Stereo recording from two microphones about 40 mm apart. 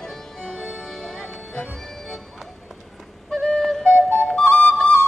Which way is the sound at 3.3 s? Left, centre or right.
Centre.